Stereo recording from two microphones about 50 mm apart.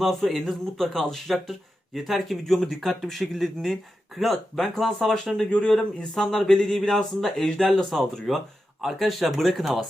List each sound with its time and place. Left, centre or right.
0.0 s speech: centre
5.6 s speech: left
6.1 s speech: centre